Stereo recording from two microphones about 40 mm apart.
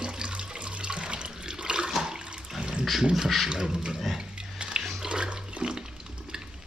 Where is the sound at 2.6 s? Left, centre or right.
Right.